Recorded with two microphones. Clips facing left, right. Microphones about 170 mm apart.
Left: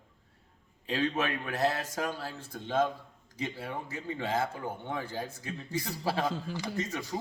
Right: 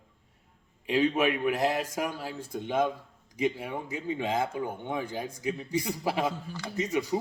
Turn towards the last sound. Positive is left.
turn(degrees=-10)  # may be behind; listen again after turning